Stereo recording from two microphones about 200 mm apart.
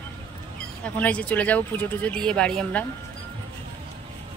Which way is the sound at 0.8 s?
5° left (ahead or behind).